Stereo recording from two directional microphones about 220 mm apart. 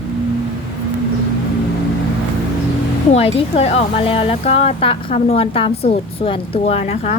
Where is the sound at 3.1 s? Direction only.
30° left (ahead or behind).